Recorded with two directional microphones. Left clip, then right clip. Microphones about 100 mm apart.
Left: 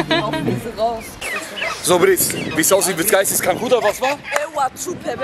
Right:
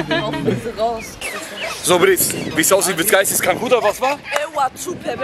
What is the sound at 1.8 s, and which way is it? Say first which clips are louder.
Speech: right 1 dB; 10° left (ahead or behind).